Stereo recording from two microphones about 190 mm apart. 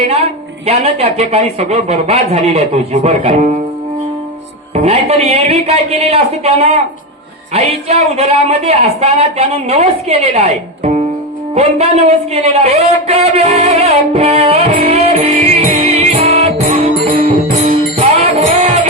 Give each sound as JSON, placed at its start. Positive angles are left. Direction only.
{"t": 0.1, "sound": "a woman's voice", "side_deg": -35}
{"t": 4.7, "sound": "a woman's voice", "side_deg": -35}
{"t": 11.5, "sound": "a sound", "side_deg": -35}
{"t": 18.2, "sound": "music", "side_deg": -35}